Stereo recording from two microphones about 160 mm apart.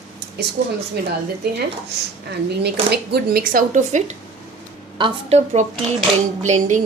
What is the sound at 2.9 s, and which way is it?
Speech, 85° right.